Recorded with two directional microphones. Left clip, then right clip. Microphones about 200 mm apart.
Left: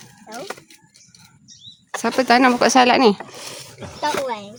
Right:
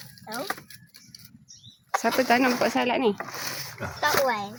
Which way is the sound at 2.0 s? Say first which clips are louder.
Left 7 dB; 25° left (ahead or behind).